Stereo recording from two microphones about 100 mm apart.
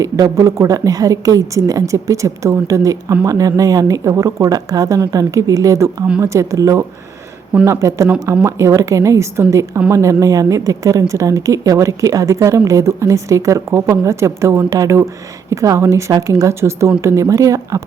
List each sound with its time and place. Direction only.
0.0 s a woman's voice: 30° right (ahead or behind)